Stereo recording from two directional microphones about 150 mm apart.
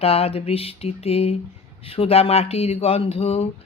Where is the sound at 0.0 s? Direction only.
40° left (ahead or behind).